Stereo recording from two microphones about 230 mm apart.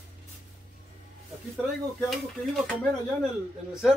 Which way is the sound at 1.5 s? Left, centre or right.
Centre.